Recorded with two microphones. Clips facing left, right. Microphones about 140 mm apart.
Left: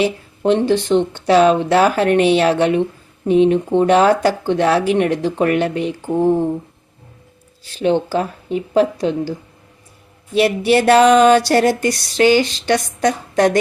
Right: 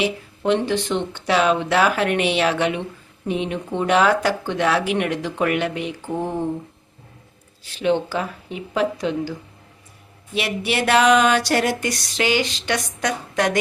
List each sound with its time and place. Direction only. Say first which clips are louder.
0.0 s speech: left 5 dB; 35° left (ahead or behind)
7.8 s speech: left 4 dB; 40° left (ahead or behind)
10.3 s speech: left 9 dB; 40° left (ahead or behind)